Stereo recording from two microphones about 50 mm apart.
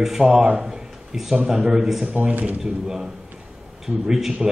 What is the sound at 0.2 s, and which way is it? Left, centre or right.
Speech, right.